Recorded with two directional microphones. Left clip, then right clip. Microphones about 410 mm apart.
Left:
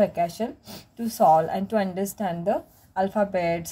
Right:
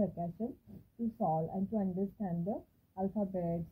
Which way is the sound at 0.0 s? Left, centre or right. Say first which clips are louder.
Left 15 dB; left.